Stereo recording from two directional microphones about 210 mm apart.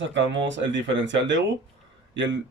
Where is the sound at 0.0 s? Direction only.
60° right (ahead or behind).